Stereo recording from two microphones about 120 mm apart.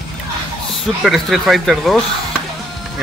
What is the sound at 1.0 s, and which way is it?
Speech, centre (ahead or behind).